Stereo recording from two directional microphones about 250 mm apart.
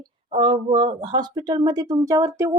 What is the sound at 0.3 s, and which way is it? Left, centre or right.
Speech, right.